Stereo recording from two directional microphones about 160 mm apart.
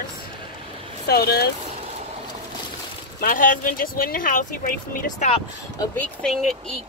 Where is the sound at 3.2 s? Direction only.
55° left (ahead or behind).